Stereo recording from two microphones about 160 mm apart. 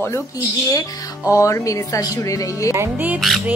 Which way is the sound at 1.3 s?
20° left (ahead or behind).